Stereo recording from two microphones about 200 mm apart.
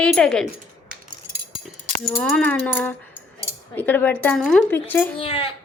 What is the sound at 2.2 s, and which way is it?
A woman's voice, 5° left (ahead or behind).